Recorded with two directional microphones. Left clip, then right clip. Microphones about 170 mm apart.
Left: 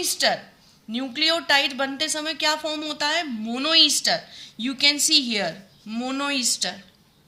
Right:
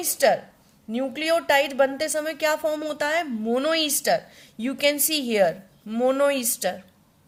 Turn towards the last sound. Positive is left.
turn(degrees=-55)  # may be behind; listen again after turning